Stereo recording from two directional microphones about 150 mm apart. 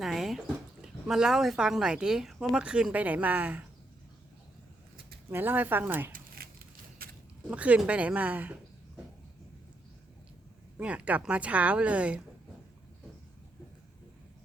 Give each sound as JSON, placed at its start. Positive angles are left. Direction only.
{"t": 0.0, "sound": "speech", "side_deg": 0}
{"t": 5.3, "sound": "a woman's voice", "side_deg": -15}
{"t": 6.1, "sound": "crumpling", "side_deg": -90}
{"t": 7.0, "sound": "a sound", "side_deg": -80}
{"t": 7.5, "sound": "a woman's voice", "side_deg": -10}
{"t": 10.8, "sound": "a woman's voice", "side_deg": -10}